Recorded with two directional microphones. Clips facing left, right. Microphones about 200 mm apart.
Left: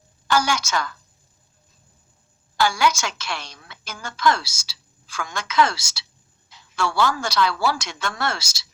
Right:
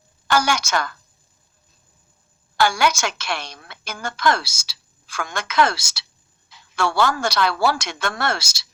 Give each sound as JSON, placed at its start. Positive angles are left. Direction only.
{"t": 0.3, "sound": "a woman's voice", "side_deg": -70}
{"t": 2.6, "sound": "a woman's voice", "side_deg": -65}